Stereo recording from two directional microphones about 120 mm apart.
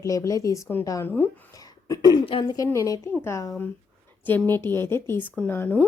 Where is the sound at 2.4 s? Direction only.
30° left (ahead or behind).